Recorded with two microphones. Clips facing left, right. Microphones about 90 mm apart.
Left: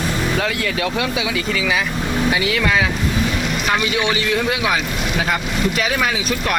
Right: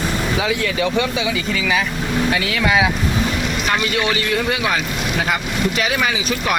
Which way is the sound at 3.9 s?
20° left (ahead or behind).